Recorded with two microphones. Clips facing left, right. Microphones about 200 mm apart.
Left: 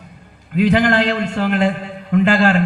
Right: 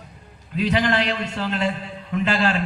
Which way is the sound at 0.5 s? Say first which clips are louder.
Left 6 dB; 50° left (ahead or behind).